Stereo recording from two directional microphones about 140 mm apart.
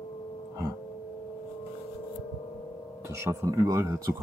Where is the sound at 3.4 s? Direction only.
25° right (ahead or behind).